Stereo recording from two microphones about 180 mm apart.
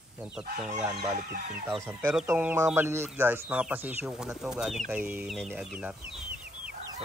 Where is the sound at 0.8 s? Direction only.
5° right (ahead or behind).